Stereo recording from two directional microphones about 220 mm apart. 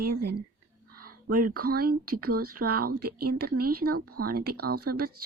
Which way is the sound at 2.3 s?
90° right.